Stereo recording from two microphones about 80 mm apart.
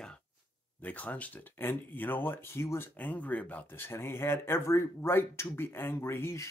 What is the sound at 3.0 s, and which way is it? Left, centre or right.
Speech, centre.